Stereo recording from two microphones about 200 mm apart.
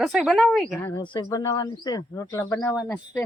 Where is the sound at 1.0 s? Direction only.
20° left (ahead or behind).